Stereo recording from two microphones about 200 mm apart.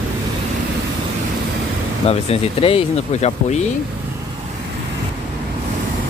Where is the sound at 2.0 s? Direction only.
30° left (ahead or behind).